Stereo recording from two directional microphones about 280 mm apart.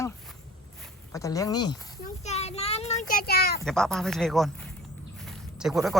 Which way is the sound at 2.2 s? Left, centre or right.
Left.